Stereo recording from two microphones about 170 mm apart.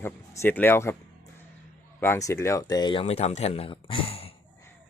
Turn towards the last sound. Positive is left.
turn(degrees=35)  # may be behind; listen again after turning